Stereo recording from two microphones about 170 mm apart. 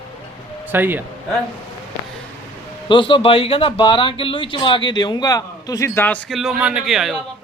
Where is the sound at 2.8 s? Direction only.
30° left (ahead or behind); by 7.2 s centre (ahead or behind).